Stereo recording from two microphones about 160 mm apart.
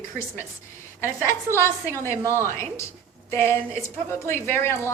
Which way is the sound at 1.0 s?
15° left (ahead or behind).